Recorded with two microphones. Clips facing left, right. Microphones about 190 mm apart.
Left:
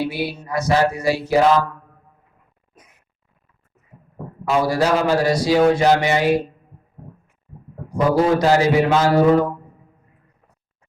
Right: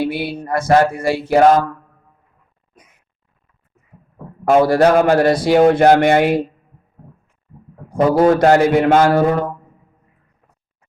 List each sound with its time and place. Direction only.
0.0 s a sound: 55° right (ahead or behind)
4.4 s speech: 55° right (ahead or behind)
8.4 s speech: 55° right (ahead or behind)